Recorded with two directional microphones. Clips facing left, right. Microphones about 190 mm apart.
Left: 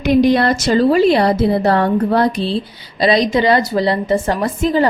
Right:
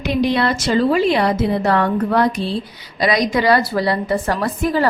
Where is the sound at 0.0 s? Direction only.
45° left (ahead or behind).